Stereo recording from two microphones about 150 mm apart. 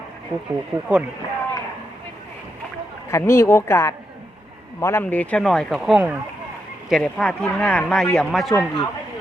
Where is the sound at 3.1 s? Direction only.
20° left (ahead or behind); by 8.6 s centre (ahead or behind).